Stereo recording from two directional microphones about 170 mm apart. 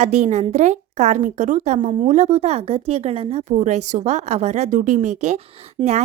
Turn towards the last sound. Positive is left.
turn(degrees=-25)  # may be behind; listen again after turning